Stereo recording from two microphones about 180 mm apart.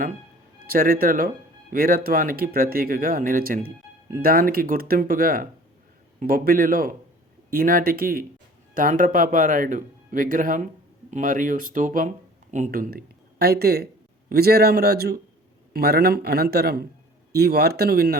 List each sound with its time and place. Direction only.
0.7 s a man's voice: 55° right (ahead or behind)